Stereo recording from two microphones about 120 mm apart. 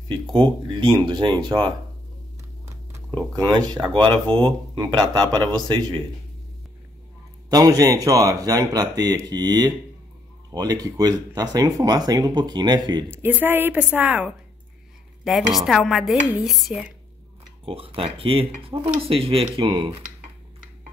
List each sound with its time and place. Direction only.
0.1 s speech: 45° right (ahead or behind)
3.3 s speech: 35° right (ahead or behind)
7.4 s speech: 30° right (ahead or behind)
13.1 s a woman's voice: 15° right (ahead or behind)
15.2 s dishes: centre (ahead or behind)
17.6 s speech: 50° right (ahead or behind)